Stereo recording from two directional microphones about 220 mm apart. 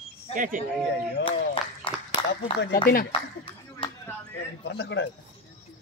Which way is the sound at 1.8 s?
25° left (ahead or behind).